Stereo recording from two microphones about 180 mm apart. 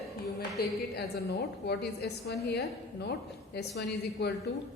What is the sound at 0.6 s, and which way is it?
A woman's voice, 60° left (ahead or behind).